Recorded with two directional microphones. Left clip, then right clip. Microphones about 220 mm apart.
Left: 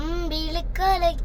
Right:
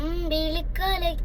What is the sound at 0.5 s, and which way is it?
Child singing, 20° left (ahead or behind).